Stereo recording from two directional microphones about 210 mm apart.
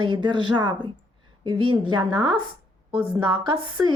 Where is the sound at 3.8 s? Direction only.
5° right (ahead or behind).